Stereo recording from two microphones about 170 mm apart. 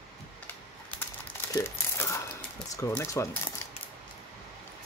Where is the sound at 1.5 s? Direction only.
15° left (ahead or behind).